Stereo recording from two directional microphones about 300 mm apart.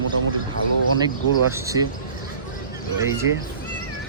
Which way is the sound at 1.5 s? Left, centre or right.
Centre.